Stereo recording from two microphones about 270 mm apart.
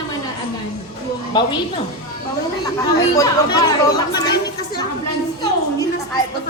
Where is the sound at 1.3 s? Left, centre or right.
Centre.